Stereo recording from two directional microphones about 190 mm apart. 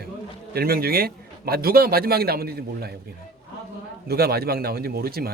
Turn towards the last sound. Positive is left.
turn(degrees=-55)  # may be behind; listen again after turning